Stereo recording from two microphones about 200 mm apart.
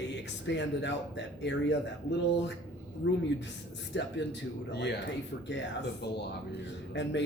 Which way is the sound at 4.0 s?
60° left (ahead or behind).